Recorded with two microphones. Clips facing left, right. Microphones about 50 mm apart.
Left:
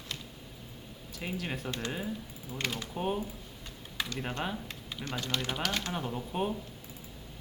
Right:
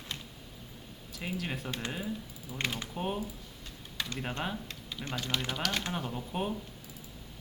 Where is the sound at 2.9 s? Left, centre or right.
Centre.